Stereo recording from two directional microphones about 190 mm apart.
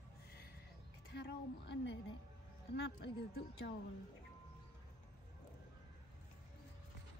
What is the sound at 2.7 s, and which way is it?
A woman's voice, 65° left (ahead or behind).